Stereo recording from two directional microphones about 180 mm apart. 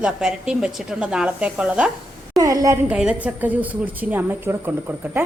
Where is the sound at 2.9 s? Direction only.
5° right (ahead or behind).